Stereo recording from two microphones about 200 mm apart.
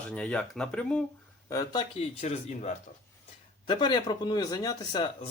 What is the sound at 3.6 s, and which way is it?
Speech, 25° left (ahead or behind).